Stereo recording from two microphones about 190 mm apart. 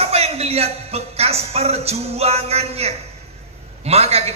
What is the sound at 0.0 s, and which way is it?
A man's voice, 35° right (ahead or behind).